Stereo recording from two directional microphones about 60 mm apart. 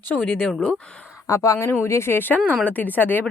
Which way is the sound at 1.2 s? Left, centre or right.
Left.